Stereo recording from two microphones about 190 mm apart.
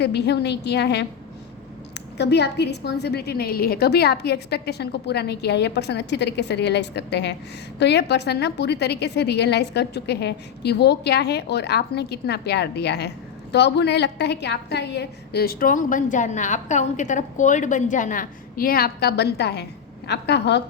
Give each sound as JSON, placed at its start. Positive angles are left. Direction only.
{"t": 0.0, "sound": "a woman's voice", "side_deg": 60}
{"t": 2.1, "sound": "a woman's voice", "side_deg": 60}